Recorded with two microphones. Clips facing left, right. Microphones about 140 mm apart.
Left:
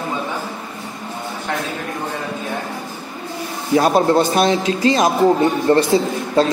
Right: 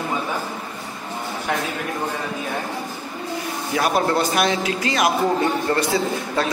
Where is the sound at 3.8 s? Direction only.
25° left (ahead or behind).